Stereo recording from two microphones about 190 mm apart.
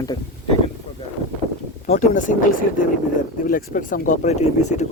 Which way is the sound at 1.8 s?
40° left (ahead or behind).